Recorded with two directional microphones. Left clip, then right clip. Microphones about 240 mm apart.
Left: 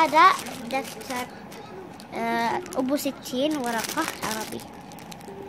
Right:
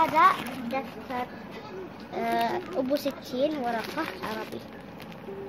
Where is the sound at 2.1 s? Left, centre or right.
Left.